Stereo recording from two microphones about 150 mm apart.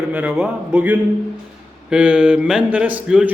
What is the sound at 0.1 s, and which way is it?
A man's voice, 10° right (ahead or behind).